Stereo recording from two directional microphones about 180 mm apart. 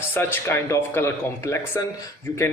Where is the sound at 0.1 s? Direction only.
15° left (ahead or behind).